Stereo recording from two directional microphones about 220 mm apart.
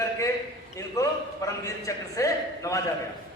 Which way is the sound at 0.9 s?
15° left (ahead or behind).